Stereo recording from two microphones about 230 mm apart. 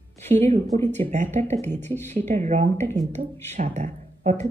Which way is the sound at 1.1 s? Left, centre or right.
Right.